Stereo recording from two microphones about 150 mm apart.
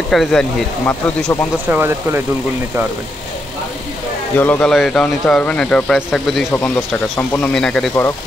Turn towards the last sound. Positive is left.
turn(degrees=5)  # may be behind; listen again after turning